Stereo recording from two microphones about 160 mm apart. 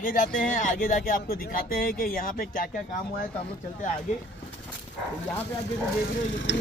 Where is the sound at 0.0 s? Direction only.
55° left (ahead or behind).